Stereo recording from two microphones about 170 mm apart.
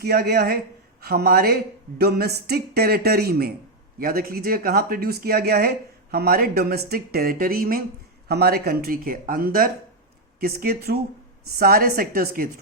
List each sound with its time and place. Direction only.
0.0 s speech: 70° right (ahead or behind)